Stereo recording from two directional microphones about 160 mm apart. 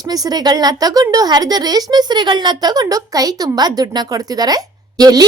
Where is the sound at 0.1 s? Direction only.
25° right (ahead or behind).